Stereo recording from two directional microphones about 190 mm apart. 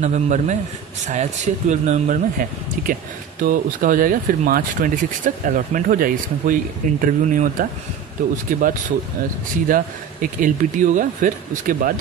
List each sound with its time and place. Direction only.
0.0 s speech: 40° right (ahead or behind)
10.4 s speech: 45° right (ahead or behind)